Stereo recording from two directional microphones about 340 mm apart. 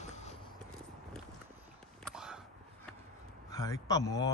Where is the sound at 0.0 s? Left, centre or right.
Centre.